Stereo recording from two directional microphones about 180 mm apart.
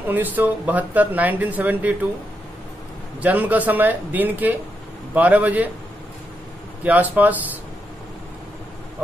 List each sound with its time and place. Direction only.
0.1 s speech: 10° right (ahead or behind)
3.2 s speech: 10° right (ahead or behind)
6.8 s speech: 10° right (ahead or behind)